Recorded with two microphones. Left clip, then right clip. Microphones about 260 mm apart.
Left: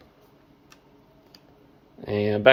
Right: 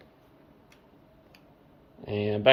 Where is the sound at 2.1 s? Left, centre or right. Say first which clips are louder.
Left 6 dB; centre.